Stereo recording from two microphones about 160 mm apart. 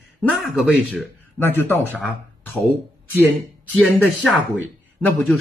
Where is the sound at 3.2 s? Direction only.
5° left (ahead or behind).